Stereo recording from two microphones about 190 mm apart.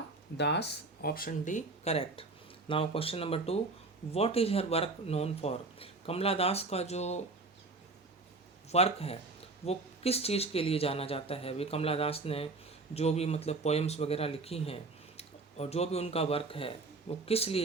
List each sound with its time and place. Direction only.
0.3 s speech: 65° left (ahead or behind); by 7.2 s 35° left (ahead or behind)
8.7 s speech: 30° left (ahead or behind)